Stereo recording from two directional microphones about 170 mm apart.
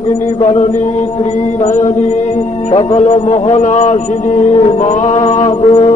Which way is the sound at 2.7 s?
40° left (ahead or behind).